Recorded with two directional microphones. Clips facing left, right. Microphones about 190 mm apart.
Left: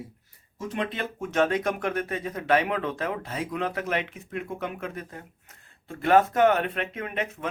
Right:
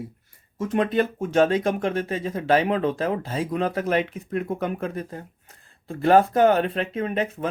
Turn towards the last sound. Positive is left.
turn(degrees=-30)  # may be behind; listen again after turning